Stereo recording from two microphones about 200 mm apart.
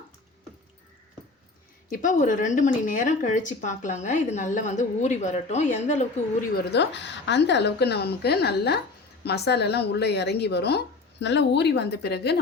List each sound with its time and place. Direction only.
1.9 s speech: 40° left (ahead or behind)
6.6 s a woman's voice: 55° left (ahead or behind)